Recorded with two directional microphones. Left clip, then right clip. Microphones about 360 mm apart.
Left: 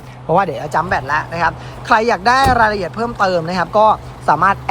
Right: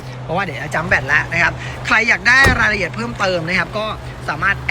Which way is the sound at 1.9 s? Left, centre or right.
Centre.